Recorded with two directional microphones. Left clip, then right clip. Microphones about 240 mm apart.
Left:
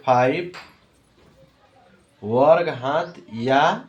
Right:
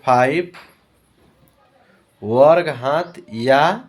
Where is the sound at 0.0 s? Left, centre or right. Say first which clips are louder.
Right 3 dB; right.